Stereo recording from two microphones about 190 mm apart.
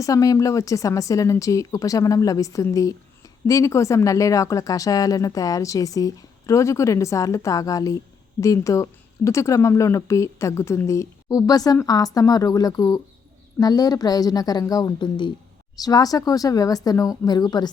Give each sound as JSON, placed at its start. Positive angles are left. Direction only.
{"t": 0.0, "sound": "a woman's voice", "side_deg": 15}